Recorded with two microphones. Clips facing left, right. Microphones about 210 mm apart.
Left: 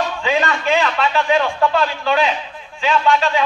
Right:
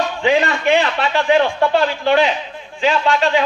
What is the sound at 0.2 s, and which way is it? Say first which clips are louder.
A man's voice: right 6 dB; 30° right (ahead or behind).